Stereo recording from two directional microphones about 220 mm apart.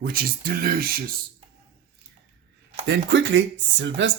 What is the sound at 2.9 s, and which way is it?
Speech, 55° right (ahead or behind).